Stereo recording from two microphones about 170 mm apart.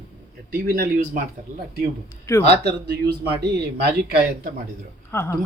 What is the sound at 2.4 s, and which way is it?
Speech, 75° right (ahead or behind).